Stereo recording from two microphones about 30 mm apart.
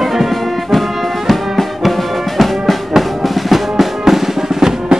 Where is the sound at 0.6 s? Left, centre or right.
Centre.